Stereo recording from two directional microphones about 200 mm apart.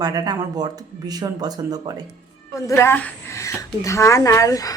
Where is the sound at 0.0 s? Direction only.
20° right (ahead or behind).